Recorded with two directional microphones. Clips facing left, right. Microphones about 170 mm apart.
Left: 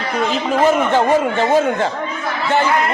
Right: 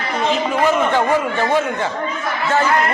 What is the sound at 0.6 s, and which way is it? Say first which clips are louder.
Speech: left 3 dB; 25° left (ahead or behind).